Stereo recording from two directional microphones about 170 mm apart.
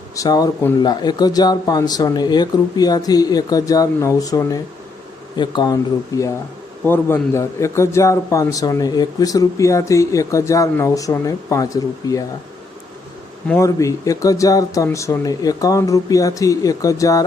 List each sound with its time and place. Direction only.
0.2 s a man's voice: 20° left (ahead or behind)
13.5 s a man's voice: 20° left (ahead or behind)